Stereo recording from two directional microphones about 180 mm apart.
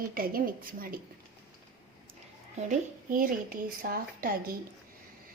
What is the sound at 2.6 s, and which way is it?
A woman's voice, 45° right (ahead or behind).